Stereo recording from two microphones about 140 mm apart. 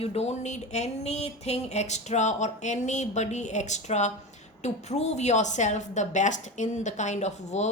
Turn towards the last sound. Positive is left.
turn(degrees=55)  # may be behind; listen again after turning